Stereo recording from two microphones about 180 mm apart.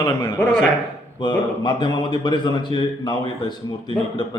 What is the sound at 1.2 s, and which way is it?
A man's voice, 25° left (ahead or behind).